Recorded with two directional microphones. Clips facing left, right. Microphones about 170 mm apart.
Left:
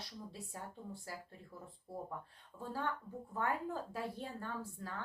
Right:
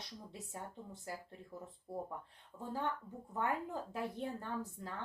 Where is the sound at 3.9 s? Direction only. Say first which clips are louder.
Right 2 dB; 20° right (ahead or behind).